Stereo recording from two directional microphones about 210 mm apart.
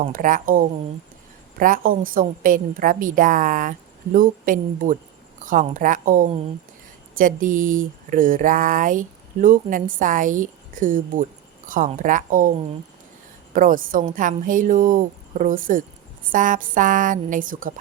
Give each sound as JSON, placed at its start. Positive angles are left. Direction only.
{"t": 0.0, "sound": "speech", "side_deg": -40}
{"t": 13.5, "sound": "speech", "side_deg": -40}